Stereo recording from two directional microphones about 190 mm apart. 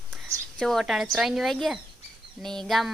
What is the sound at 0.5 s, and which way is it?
Speech, centre (ahead or behind).